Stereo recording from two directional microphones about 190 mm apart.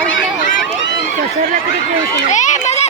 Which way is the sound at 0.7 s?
70° left (ahead or behind).